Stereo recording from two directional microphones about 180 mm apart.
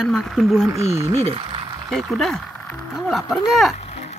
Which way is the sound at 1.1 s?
35° right (ahead or behind).